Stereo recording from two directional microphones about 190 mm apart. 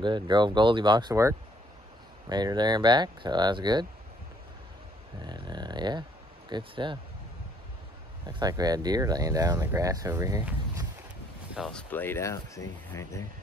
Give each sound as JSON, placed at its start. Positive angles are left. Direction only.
{"t": 0.0, "sound": "speech", "side_deg": -25}
{"t": 5.2, "sound": "speech", "side_deg": -20}
{"t": 8.3, "sound": "speech", "side_deg": -20}
{"t": 11.5, "sound": "speech", "side_deg": -5}
{"t": 11.9, "sound": "speech", "side_deg": 10}